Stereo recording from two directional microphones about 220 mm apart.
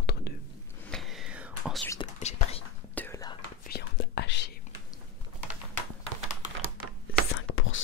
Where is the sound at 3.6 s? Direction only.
45° left (ahead or behind).